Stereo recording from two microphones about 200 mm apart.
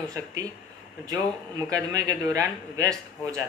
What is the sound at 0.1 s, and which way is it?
Speech, 15° right (ahead or behind).